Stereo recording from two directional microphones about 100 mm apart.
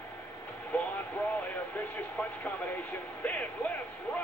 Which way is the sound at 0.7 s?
15° left (ahead or behind).